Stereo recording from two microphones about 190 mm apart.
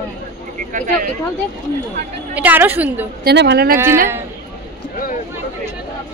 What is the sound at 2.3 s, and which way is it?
Speech, 10° right (ahead or behind).